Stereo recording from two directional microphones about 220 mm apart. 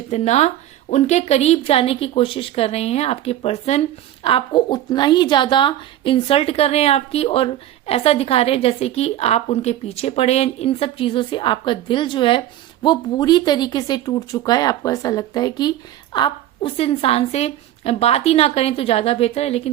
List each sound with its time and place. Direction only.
0.1 s a woman's voice: 30° left (ahead or behind)